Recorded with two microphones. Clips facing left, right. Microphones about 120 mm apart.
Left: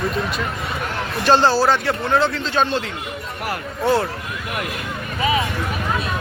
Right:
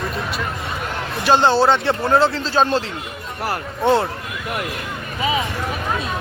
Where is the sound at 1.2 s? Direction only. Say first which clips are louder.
Right 1 dB; 15° right (ahead or behind).